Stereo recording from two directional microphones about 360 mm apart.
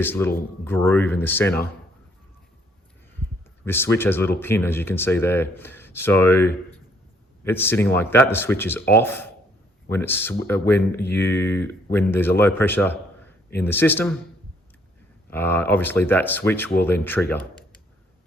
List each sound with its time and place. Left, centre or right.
0.0 s speech: centre
3.7 s speech: centre
15.3 s speech: centre